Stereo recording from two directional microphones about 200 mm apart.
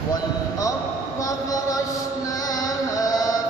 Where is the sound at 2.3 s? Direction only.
20° left (ahead or behind).